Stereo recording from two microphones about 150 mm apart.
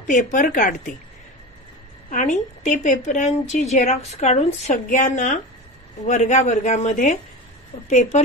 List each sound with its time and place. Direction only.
0.0 s a woman's voice: 60° left (ahead or behind)
2.0 s a woman's voice: 55° left (ahead or behind)
4.7 s a woman's voice: 65° left (ahead or behind)